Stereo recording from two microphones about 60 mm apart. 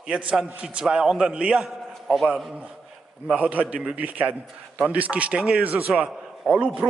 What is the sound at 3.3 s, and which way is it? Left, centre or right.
A man's voice, right.